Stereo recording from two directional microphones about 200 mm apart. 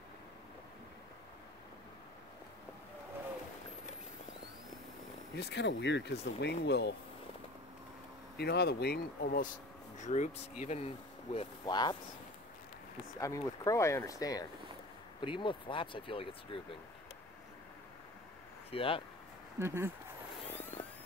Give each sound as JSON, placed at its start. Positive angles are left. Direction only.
{"t": 5.3, "sound": "speech", "side_deg": 60}
{"t": 8.4, "sound": "speech", "side_deg": 55}
{"t": 9.9, "sound": "speech", "side_deg": 35}
{"t": 11.3, "sound": "speech", "side_deg": 20}
{"t": 13.2, "sound": "speech", "side_deg": 15}
{"t": 18.7, "sound": "speech", "side_deg": 25}
{"t": 19.6, "sound": "speech", "side_deg": -10}
{"t": 20.7, "sound": "a sound", "side_deg": 30}